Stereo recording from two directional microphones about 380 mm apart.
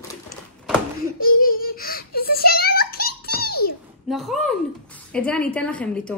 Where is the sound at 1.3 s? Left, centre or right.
Left.